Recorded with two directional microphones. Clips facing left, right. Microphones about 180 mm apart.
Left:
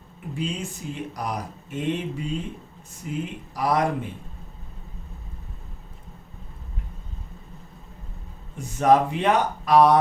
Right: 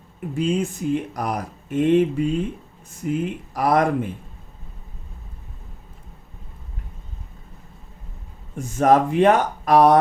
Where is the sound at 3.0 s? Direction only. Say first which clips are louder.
Right 7 dB; 55° right (ahead or behind).